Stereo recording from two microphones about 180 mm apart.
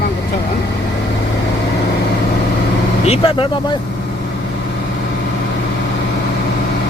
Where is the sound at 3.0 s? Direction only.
35° left (ahead or behind).